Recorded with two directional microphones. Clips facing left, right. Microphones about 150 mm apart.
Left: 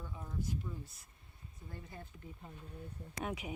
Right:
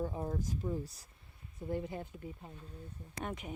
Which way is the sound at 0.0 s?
50° right (ahead or behind).